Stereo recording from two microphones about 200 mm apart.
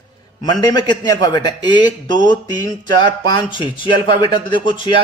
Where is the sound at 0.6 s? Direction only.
20° left (ahead or behind).